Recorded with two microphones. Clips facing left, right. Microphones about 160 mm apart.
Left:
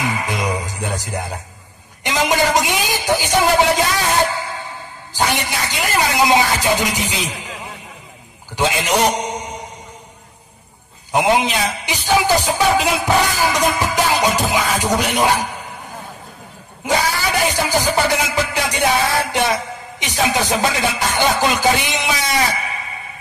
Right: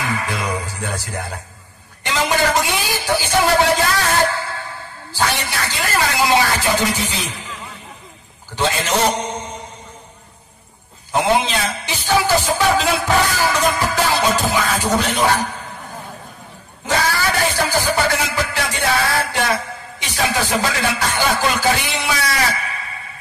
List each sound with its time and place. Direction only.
0.0 s music: 20° left (ahead or behind)
2.0 s a man's voice: 20° left (ahead or behind)
4.3 s a sound: 15° left (ahead or behind)
8.5 s a man's voice: 15° left (ahead or behind)
11.1 s a man's voice: 15° left (ahead or behind)
17.5 s music: 15° left (ahead or behind)